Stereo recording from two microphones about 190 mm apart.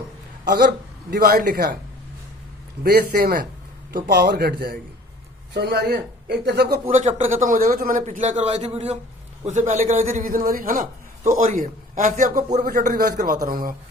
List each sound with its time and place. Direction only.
1.1 s a man's voice: 55° right (ahead or behind)
2.8 s a man's voice: 50° right (ahead or behind)
6.9 s a man's voice: 40° right (ahead or behind)